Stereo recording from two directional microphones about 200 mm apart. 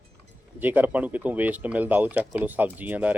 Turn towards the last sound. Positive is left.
turn(degrees=-10)  # may be behind; listen again after turning